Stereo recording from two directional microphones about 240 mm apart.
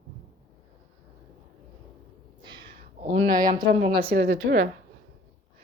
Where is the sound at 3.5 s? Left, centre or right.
Centre.